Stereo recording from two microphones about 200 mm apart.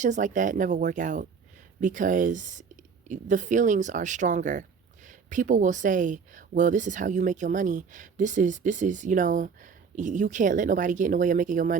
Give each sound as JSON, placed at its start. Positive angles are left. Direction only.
{"t": 0.0, "sound": "speech", "side_deg": -40}